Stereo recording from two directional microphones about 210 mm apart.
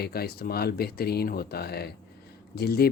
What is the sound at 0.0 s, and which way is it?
Speech, 50° left (ahead or behind).